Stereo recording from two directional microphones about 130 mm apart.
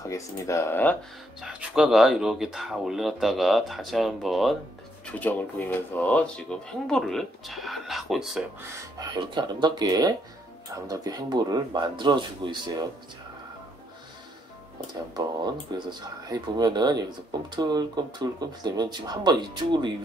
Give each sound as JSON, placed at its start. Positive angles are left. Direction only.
{"t": 0.0, "sound": "speech", "side_deg": 25}
{"t": 1.4, "sound": "speech", "side_deg": -5}
{"t": 5.0, "sound": "speech", "side_deg": 15}
{"t": 9.1, "sound": "speech", "side_deg": -35}
{"t": 15.1, "sound": "speech", "side_deg": -35}